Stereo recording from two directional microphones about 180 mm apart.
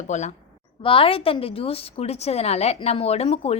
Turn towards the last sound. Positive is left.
turn(degrees=35)  # may be behind; listen again after turning